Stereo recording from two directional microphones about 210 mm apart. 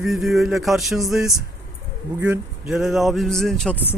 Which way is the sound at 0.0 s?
Centre (ahead or behind).